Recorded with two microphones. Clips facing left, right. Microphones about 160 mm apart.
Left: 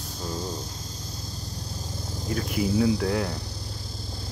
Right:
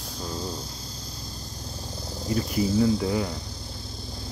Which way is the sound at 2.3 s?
Centre (ahead or behind).